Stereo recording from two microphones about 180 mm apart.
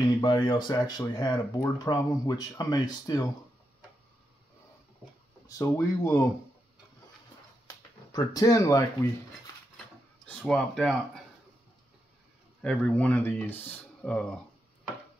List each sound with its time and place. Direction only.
0.2 s speech: 25° left (ahead or behind)
5.5 s speech: 20° left (ahead or behind)
7.6 s speech: 20° left (ahead or behind)
10.2 s speech: 5° left (ahead or behind)
12.6 s speech: 5° left (ahead or behind)